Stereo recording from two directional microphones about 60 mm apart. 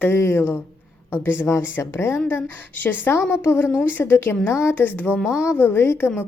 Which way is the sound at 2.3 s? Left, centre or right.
Left.